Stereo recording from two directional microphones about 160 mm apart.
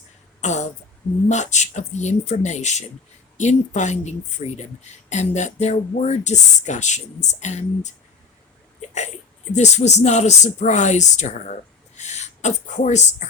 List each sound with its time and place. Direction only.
0.4 s throat clearing: 45° left (ahead or behind)
1.3 s speech: 45° left (ahead or behind)
9.6 s speech: 45° left (ahead or behind)